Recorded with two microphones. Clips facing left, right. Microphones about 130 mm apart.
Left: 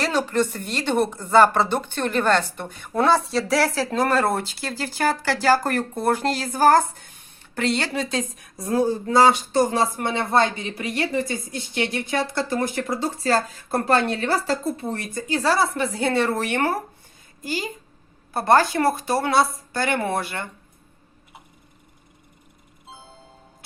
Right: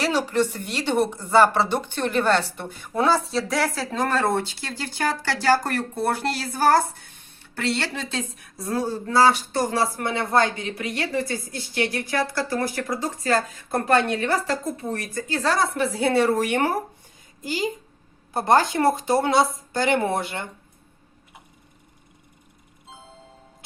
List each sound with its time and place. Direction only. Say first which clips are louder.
0.5 s speech: left 2 dB; 50° left (ahead or behind)
0.8 s a woman's voice: even; 15° right (ahead or behind); by 15.2 s 25° left (ahead or behind)
15.3 s a woman's voice: left 2 dB; 10° left (ahead or behind); by 20.5 s 20° right (ahead or behind)